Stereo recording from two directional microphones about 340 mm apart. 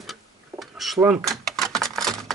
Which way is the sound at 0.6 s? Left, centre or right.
Centre.